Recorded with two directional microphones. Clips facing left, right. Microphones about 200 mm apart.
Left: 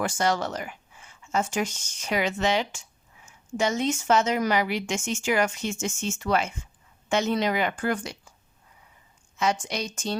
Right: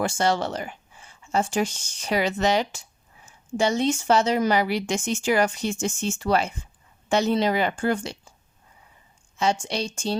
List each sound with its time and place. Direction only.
0.0 s speech: 30° right (ahead or behind)
9.4 s a woman's voice: 30° right (ahead or behind)